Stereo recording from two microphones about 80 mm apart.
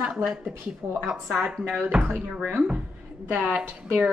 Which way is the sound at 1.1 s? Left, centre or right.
Centre.